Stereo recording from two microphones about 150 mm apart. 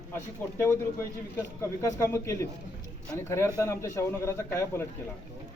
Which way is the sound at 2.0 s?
20° left (ahead or behind).